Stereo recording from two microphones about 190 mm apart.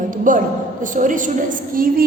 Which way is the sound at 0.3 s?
45° right (ahead or behind).